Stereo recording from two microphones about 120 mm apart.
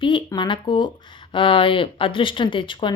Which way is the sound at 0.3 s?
40° left (ahead or behind).